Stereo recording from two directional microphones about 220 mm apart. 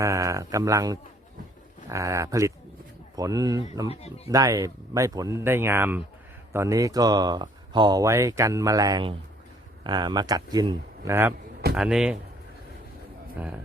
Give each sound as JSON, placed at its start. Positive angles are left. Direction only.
{"t": 0.0, "sound": "speech", "side_deg": -15}
{"t": 13.4, "sound": "speech", "side_deg": -5}